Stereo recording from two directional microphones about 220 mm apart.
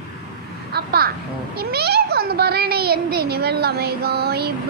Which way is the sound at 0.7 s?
45° right (ahead or behind).